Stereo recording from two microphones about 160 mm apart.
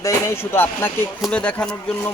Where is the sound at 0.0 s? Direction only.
15° left (ahead or behind).